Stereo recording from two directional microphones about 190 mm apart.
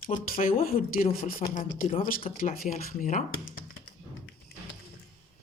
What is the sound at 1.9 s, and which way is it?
Speech, 30° left (ahead or behind).